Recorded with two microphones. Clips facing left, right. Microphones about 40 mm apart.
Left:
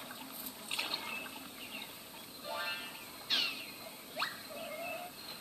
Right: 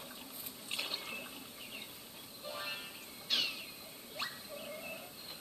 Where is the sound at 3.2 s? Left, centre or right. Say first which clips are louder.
Left 1 dB; centre.